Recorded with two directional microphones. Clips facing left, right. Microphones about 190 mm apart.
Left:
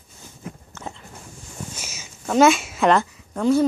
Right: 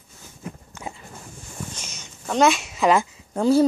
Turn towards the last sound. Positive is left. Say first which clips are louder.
# right 1 dB
turn(degrees=-30)  # may be behind; listen again after turning